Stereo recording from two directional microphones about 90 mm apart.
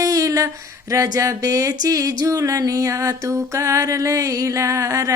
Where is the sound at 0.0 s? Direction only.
40° right (ahead or behind).